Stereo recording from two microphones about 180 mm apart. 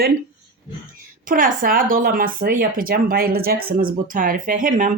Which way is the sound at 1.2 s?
50° right (ahead or behind).